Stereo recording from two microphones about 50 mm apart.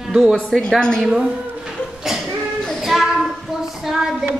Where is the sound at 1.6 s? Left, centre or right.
Centre.